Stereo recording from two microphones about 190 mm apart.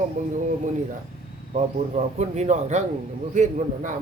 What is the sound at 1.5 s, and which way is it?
A man's voice, 35° right (ahead or behind).